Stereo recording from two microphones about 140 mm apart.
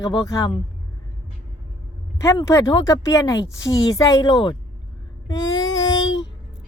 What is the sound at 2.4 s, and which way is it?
Speech, 20° left (ahead or behind).